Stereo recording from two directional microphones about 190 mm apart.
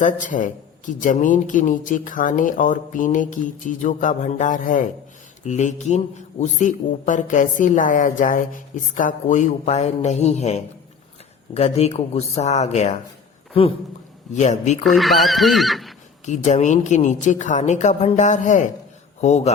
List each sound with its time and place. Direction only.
0.0 s a man's voice: 45° left (ahead or behind)
14.8 s speech: centre (ahead or behind)
16.2 s speech: 40° left (ahead or behind)